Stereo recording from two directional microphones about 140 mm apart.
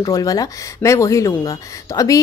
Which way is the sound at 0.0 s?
25° left (ahead or behind).